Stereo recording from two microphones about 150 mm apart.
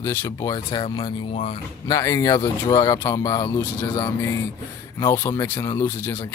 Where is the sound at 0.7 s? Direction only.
40° left (ahead or behind).